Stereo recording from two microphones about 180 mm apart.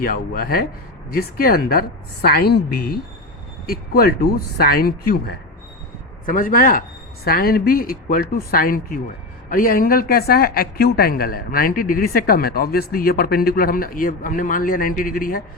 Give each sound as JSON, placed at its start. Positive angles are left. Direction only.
{"t": 0.0, "sound": "speech", "side_deg": 55}
{"t": 6.2, "sound": "a woman's voice", "side_deg": 50}